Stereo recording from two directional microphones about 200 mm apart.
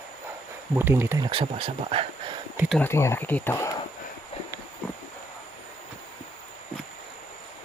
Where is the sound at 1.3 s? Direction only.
25° right (ahead or behind).